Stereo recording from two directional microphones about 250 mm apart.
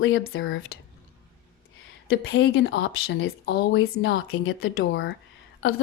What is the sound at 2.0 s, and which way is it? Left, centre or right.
Speech, left.